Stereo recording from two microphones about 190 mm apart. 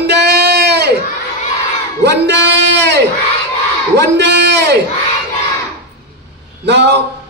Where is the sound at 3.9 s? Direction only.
65° right (ahead or behind).